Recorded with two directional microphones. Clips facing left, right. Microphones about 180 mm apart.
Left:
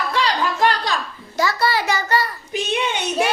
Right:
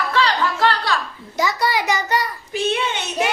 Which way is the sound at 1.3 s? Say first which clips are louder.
Even; 15° right (ahead or behind).